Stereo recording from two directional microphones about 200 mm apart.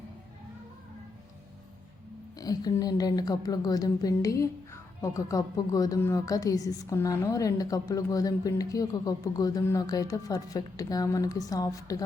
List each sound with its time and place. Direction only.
2.4 s a woman's voice: 20° left (ahead or behind)